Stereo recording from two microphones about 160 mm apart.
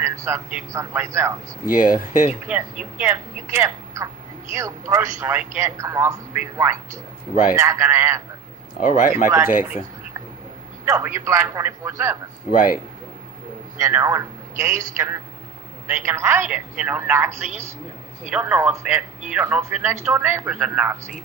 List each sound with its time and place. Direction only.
0.0 s a man's voice: 15° right (ahead or behind)
1.6 s speech: 60° left (ahead or behind)
2.5 s a man's voice: 10° right (ahead or behind)
8.8 s speech: 55° left (ahead or behind)
9.2 s a man's voice: 15° right (ahead or behind)
10.8 s a man's voice: 15° right (ahead or behind)
12.5 s speech: 60° left (ahead or behind)
13.7 s a man's voice: 20° right (ahead or behind)